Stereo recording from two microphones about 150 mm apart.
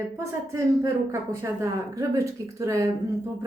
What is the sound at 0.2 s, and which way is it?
A woman's voice, 20° right (ahead or behind).